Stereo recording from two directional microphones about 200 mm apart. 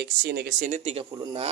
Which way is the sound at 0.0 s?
55° right (ahead or behind).